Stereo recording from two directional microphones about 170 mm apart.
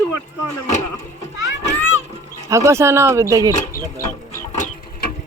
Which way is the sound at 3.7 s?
55° left (ahead or behind).